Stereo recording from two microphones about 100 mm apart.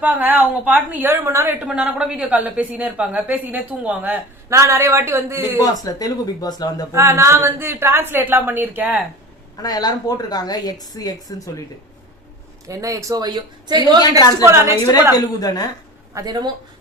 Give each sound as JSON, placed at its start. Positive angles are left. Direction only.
{"t": 0.0, "sound": "a woman's voice", "side_deg": -15}
{"t": 1.5, "sound": "a woman's voice", "side_deg": -10}
{"t": 4.4, "sound": "a woman's voice", "side_deg": -30}
{"t": 5.4, "sound": "a woman's voice", "side_deg": 40}
{"t": 6.9, "sound": "a woman's voice", "side_deg": -30}
{"t": 9.6, "sound": "a woman's voice", "side_deg": 40}
{"t": 12.6, "sound": "a man's voice", "side_deg": -35}
{"t": 14.2, "sound": "a woman's voice", "side_deg": 40}
{"t": 14.4, "sound": "a woman's voice", "side_deg": -30}
{"t": 15.1, "sound": "a woman's voice", "side_deg": 40}
{"t": 16.1, "sound": "a man's voice", "side_deg": -40}